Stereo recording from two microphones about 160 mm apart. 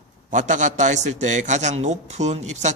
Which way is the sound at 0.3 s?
50° right (ahead or behind).